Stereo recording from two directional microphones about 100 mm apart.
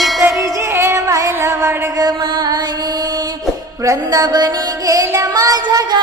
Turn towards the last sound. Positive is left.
turn(degrees=-40)  # may be behind; listen again after turning